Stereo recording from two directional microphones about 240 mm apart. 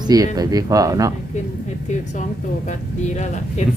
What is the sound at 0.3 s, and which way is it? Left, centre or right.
Speech, centre.